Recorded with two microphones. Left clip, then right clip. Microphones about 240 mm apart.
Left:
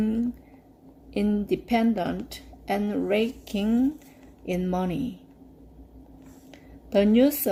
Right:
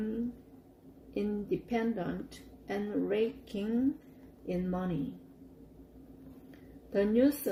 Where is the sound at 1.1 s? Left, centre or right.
Left.